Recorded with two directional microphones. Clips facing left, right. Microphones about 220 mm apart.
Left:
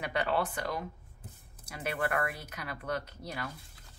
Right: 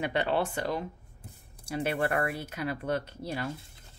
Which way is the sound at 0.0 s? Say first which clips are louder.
Right 3 dB; 25° right (ahead or behind).